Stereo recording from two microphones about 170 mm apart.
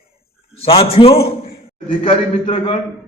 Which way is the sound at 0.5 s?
35° left (ahead or behind).